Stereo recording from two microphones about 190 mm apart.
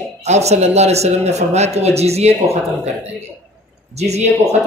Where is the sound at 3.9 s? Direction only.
35° right (ahead or behind).